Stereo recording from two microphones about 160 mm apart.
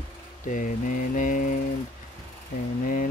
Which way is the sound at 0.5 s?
55° left (ahead or behind).